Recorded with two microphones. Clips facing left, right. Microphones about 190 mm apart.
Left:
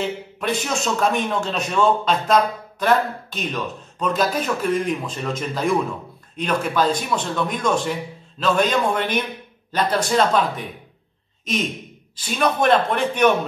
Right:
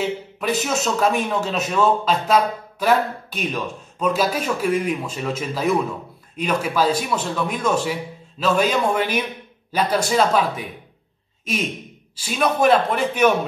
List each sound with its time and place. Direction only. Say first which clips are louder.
0.0 s a man's voice: right 1 dB; 5° right (ahead or behind)
12.2 s a man's voice: right 1 dB; 5° right (ahead or behind)